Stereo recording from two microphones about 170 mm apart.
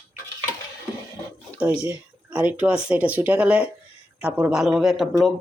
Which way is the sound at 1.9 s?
10° right (ahead or behind).